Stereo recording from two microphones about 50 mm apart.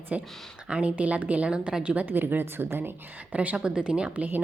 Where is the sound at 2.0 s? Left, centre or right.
Right.